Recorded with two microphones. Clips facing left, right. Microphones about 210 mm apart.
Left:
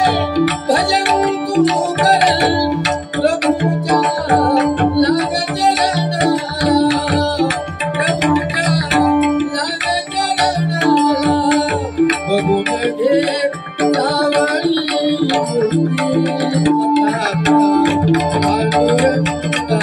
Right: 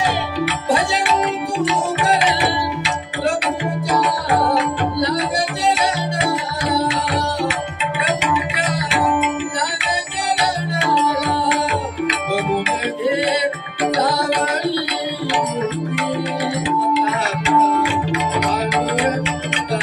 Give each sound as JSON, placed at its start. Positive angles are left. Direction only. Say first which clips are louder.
{"t": 0.0, "sound": "music", "louder": "left 7 dB", "side_deg": 40}
{"t": 10.8, "sound": "music", "louder": "left 8 dB", "side_deg": 40}